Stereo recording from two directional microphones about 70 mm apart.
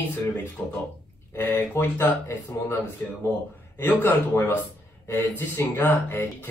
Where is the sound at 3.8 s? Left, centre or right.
Left.